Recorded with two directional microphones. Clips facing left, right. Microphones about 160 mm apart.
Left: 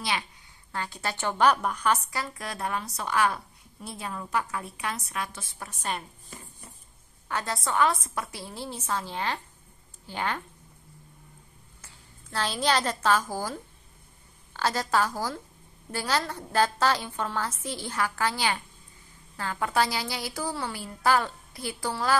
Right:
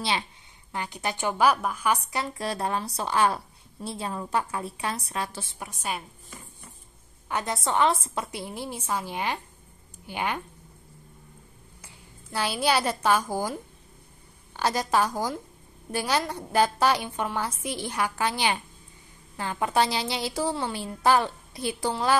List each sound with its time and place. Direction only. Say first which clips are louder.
0.7 s a woman's voice: right 2 dB; 20° right (ahead or behind)
2.0 s a woman's voice: right 4 dB; 25° right (ahead or behind)
5.6 s a woman's voice: even; 10° right (ahead or behind)
7.2 s a woman's voice: right 2 dB; 20° right (ahead or behind)
11.8 s a woman's voice: right 3 dB; 15° right (ahead or behind)